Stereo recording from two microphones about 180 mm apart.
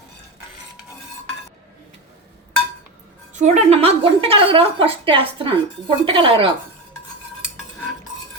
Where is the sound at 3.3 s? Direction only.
40° right (ahead or behind).